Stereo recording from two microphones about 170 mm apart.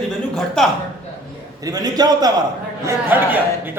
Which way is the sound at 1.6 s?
20° right (ahead or behind).